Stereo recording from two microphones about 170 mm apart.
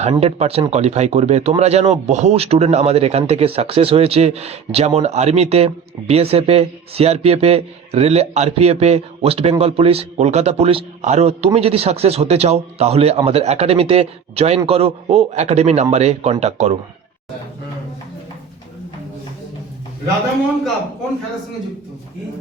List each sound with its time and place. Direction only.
0.0 s speech: 35° right (ahead or behind)